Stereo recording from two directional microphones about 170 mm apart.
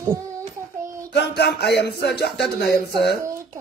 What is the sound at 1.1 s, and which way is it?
Speech, 75° left (ahead or behind).